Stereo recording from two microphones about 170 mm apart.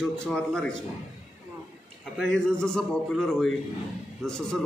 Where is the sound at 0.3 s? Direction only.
5° left (ahead or behind).